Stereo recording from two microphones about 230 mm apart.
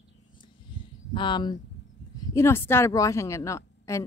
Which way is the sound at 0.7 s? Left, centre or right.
Centre.